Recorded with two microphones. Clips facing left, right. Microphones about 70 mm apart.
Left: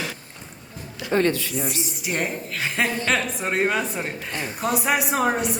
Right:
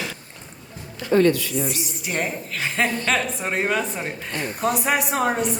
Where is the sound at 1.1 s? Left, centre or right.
Left.